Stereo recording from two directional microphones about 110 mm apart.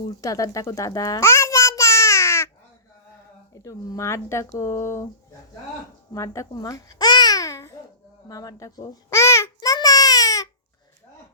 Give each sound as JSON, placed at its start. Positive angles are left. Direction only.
{"t": 0.2, "sound": "babbling", "side_deg": 30}
{"t": 3.5, "sound": "speech", "side_deg": 30}
{"t": 6.1, "sound": "babbling", "side_deg": 30}
{"t": 8.3, "sound": "speech", "side_deg": 35}
{"t": 9.6, "sound": "babbling", "side_deg": 35}